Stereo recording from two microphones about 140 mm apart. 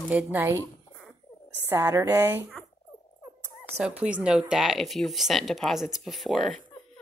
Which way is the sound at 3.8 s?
10° right (ahead or behind).